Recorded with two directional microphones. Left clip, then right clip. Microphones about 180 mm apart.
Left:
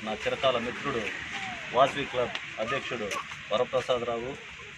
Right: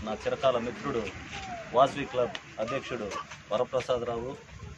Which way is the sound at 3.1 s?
15° right (ahead or behind).